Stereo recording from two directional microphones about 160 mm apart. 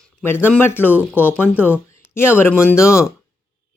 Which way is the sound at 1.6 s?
15° left (ahead or behind).